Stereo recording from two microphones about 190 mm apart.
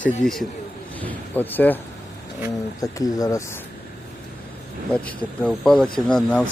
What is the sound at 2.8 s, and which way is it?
Speech, 20° left (ahead or behind).